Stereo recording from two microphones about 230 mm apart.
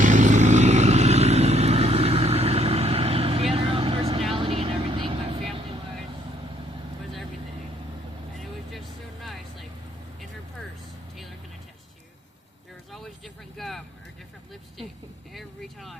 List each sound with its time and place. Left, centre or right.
0.0 s vehicle: right
9.2 s vehicle: centre
13.6 s vehicle: centre
15.3 s vehicle: centre